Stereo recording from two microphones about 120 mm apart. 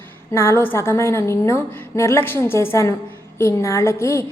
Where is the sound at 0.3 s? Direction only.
20° left (ahead or behind).